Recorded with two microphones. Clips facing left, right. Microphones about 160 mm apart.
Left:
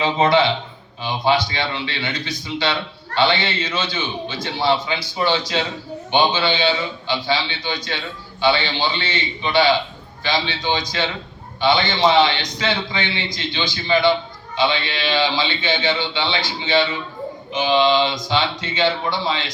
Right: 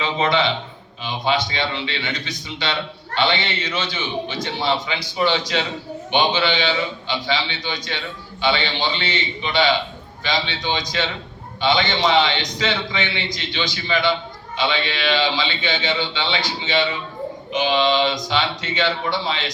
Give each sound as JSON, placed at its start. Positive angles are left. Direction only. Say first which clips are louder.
{"t": 0.0, "sound": "a man's voice", "louder": "left 4 dB", "side_deg": 30}
{"t": 1.7, "sound": "a man's voice", "louder": "even", "side_deg": -30}
{"t": 2.0, "sound": "a man's voice", "louder": "left 2 dB", "side_deg": 30}
{"t": 9.0, "sound": "a man's voice", "louder": "even", "side_deg": 30}